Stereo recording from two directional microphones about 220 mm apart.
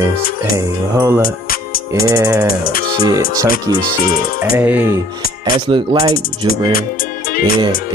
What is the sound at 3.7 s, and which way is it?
Speech, 15° right (ahead or behind).